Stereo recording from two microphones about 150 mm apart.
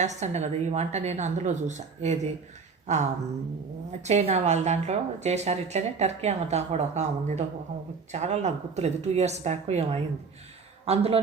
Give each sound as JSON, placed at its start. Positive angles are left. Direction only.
{"t": 0.0, "sound": "a woman's voice", "side_deg": -50}
{"t": 2.8, "sound": "a sound", "side_deg": -50}
{"t": 4.0, "sound": "a woman's voice", "side_deg": -50}